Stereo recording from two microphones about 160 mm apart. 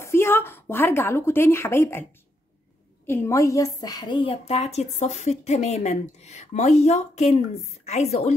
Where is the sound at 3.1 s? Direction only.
20° left (ahead or behind).